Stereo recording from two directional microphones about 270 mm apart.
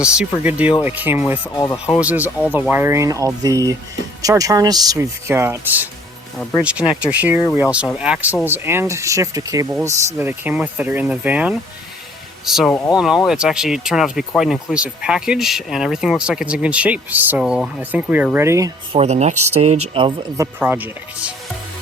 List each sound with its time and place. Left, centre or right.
0.0 s speech: centre
1.5 s speech: centre
2.0 s speech: centre
18.9 s speech: right; by 21.3 s centre